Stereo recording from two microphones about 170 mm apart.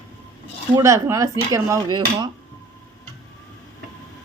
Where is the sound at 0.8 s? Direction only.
15° right (ahead or behind).